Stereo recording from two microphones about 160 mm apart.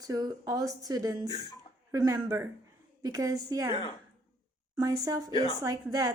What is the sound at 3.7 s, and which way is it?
Speech, 35° left (ahead or behind).